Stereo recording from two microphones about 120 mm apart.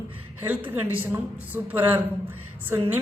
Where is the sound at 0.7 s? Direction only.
15° right (ahead or behind).